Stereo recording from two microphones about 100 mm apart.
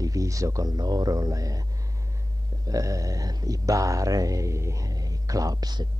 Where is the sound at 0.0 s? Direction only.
35° right (ahead or behind).